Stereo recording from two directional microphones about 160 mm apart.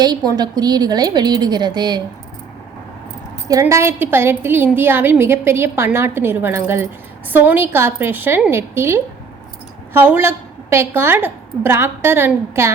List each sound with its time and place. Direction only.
0.3 s a woman's voice: 25° right (ahead or behind)
3.5 s a woman's voice: 15° right (ahead or behind)